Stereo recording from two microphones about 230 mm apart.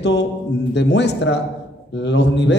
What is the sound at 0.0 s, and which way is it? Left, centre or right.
Mantra, left.